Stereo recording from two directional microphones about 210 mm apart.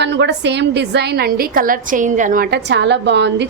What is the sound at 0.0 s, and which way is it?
A woman's voice, 55° right (ahead or behind).